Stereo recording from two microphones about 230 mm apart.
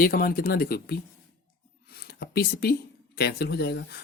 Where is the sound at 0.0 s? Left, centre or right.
Left.